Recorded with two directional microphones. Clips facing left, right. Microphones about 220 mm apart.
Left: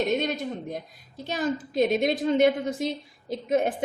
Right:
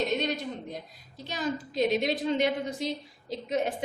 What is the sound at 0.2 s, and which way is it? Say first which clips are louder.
A woman's voice: left 2 dB; 50° left (ahead or behind).